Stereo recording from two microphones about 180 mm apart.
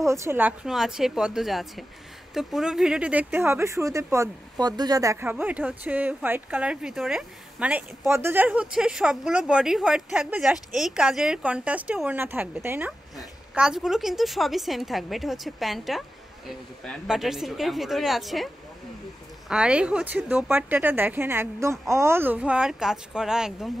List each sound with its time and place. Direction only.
0.0 s a woman's voice: 15° right (ahead or behind); by 18.5 s centre (ahead or behind)
19.5 s speech: 5° right (ahead or behind)